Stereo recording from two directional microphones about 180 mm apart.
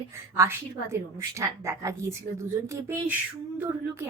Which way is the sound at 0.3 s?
15° right (ahead or behind).